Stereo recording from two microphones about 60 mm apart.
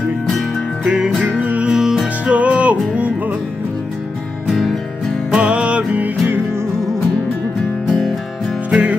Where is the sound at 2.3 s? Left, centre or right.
Right.